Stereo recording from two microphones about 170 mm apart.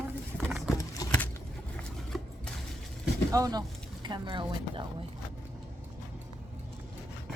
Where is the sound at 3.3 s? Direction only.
20° right (ahead or behind).